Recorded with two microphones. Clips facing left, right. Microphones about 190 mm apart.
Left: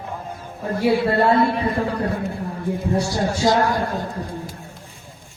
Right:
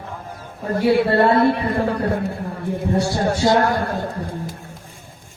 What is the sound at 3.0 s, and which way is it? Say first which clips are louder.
Speech: right 3 dB; 60° right (ahead or behind).